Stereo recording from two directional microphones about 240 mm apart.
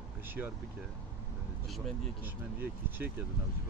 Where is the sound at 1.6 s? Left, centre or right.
Centre.